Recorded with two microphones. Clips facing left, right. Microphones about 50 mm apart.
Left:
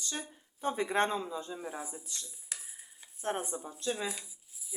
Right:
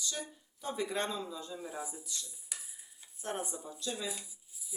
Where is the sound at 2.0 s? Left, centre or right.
Left.